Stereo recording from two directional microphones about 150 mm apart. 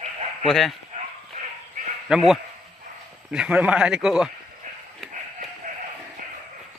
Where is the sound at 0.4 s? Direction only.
Centre (ahead or behind).